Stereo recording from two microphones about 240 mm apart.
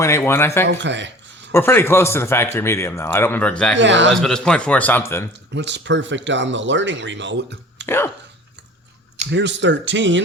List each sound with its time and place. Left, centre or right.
0.0 s speech: centre
0.7 s speech: right
1.5 s speech: centre
3.8 s speech: right
4.1 s a man's voice: centre
5.5 s speech: right
7.9 s speech: centre
9.3 s speech: right